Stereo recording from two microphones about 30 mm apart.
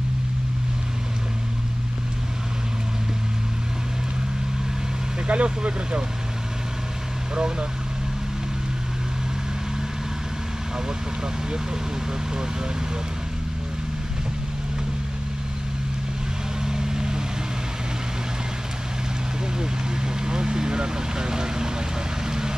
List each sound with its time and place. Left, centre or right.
5.2 s speech: right
16.6 s vehicle: right
19.6 s speech: right